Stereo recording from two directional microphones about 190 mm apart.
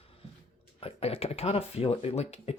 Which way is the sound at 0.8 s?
30° left (ahead or behind).